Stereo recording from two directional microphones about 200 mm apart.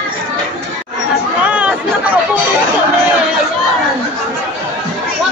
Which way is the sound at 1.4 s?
5° right (ahead or behind).